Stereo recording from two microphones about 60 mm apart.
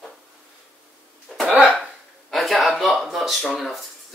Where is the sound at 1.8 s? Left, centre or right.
Centre.